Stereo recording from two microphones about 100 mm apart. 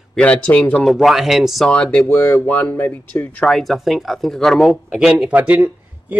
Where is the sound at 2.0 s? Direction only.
25° left (ahead or behind).